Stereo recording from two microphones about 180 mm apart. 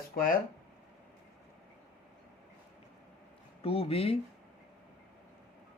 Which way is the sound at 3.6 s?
30° left (ahead or behind).